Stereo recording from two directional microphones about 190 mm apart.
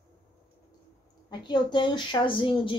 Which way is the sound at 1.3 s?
25° left (ahead or behind).